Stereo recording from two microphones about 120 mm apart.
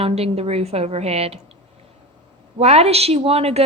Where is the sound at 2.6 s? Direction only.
60° right (ahead or behind).